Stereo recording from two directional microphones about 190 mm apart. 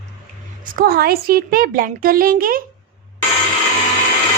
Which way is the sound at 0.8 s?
55° right (ahead or behind).